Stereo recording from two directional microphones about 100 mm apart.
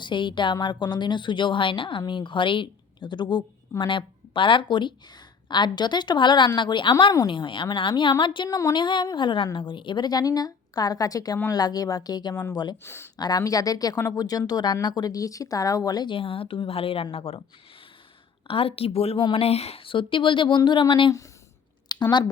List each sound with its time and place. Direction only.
0.0 s a woman's voice: 55° left (ahead or behind)
8.4 s speech: 40° left (ahead or behind)
8.7 s a woman's voice: 50° left (ahead or behind)
12.3 s speech: 25° left (ahead or behind)
13.1 s speech: 40° left (ahead or behind)
16.1 s a woman's voice: 65° left (ahead or behind)
18.4 s a woman's voice: 70° left (ahead or behind)
21.9 s a sound: 45° left (ahead or behind)